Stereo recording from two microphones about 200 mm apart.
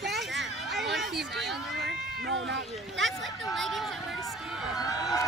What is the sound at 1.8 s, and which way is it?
Cat, 65° right (ahead or behind).